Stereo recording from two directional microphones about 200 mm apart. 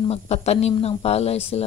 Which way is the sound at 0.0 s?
30° left (ahead or behind).